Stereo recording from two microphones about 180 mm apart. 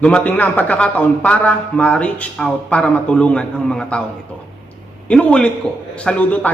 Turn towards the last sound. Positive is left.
turn(degrees=10)  # may be behind; listen again after turning